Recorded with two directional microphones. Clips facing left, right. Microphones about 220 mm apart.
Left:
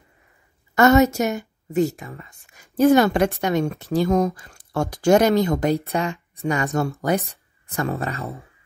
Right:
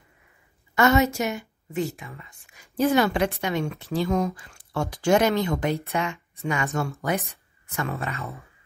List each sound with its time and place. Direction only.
0.7 s speech: 45° left (ahead or behind)